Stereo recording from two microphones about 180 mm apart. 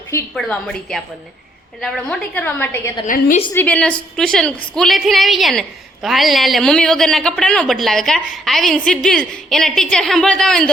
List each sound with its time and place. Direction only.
0.3 s a woman's voice: 5° left (ahead or behind)
3.1 s a woman's voice: 50° left (ahead or behind)
3.5 s a woman's voice: 10° left (ahead or behind)